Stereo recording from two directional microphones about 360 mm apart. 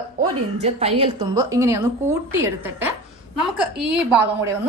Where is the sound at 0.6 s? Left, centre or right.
Centre.